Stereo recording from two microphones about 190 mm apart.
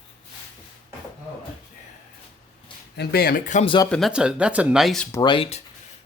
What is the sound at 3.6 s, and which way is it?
Speech, 25° left (ahead or behind).